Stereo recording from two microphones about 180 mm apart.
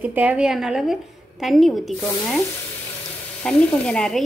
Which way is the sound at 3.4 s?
5° left (ahead or behind).